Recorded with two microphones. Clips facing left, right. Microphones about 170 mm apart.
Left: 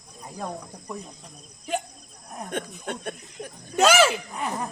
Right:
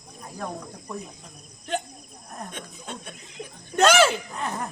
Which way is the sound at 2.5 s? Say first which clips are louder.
Left 7 dB; 55° left (ahead or behind).